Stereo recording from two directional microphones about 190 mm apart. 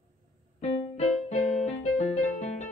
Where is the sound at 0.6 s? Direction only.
35° left (ahead or behind).